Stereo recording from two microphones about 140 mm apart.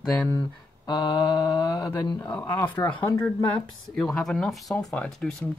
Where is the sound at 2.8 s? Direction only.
35° left (ahead or behind).